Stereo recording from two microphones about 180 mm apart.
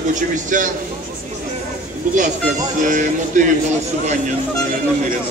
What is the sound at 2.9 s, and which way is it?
Speech, 45° right (ahead or behind).